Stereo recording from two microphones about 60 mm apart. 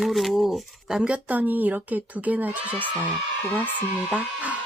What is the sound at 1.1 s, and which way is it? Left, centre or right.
Speech, right.